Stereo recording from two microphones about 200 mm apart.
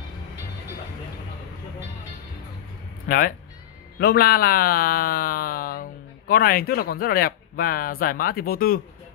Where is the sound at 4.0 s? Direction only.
50° left (ahead or behind).